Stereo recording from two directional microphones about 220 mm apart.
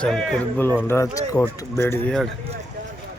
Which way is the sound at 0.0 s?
Centre (ahead or behind).